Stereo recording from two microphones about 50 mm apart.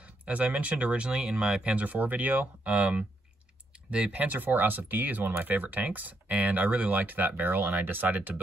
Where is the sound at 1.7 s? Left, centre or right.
Right.